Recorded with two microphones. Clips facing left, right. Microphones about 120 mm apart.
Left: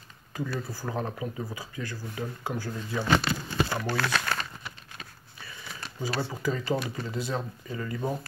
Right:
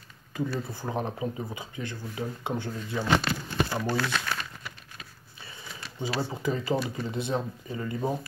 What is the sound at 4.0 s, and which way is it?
Speech, 65° left (ahead or behind).